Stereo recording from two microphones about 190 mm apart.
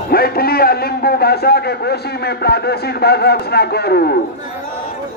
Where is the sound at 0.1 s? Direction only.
55° left (ahead or behind).